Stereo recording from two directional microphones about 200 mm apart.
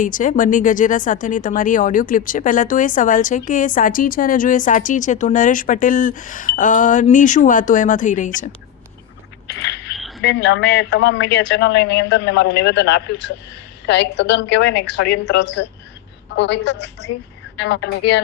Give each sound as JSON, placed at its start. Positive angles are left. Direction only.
{"t": 0.0, "sound": "speech", "side_deg": 40}
{"t": 9.6, "sound": "a sound", "side_deg": 60}
{"t": 10.0, "sound": "frog", "side_deg": 0}
{"t": 10.2, "sound": "speech", "side_deg": 60}